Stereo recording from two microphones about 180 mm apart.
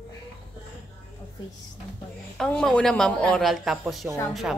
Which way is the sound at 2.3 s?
5° left (ahead or behind).